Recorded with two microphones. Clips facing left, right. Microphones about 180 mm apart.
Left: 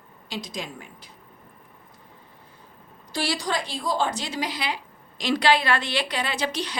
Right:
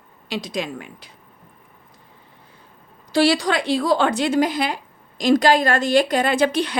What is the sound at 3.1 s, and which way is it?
A woman's voice, 75° right (ahead or behind).